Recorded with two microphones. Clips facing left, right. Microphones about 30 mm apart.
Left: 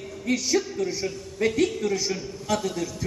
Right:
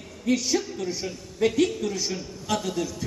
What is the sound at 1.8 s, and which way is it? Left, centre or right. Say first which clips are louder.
Speech: left 3 dB; centre.